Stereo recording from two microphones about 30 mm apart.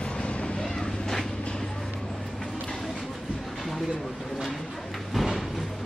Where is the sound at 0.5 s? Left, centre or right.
Left.